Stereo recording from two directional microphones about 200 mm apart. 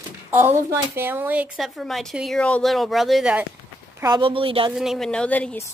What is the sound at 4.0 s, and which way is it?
Speech, 25° right (ahead or behind).